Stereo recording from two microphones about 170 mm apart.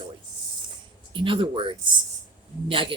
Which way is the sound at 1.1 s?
30° right (ahead or behind).